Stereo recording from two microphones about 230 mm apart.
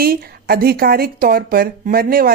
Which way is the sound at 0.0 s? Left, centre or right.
Right.